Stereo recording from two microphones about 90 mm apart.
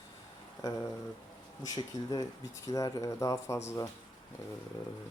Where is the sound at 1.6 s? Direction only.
45° left (ahead or behind).